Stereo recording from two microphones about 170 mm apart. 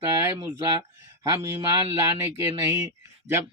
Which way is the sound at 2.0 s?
15° right (ahead or behind).